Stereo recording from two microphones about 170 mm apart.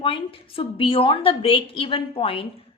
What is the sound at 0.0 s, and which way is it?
A woman's voice, 30° left (ahead or behind).